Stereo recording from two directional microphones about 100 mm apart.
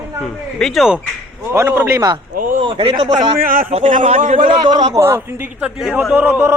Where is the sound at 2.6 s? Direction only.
60° right (ahead or behind); by 3.9 s 80° right.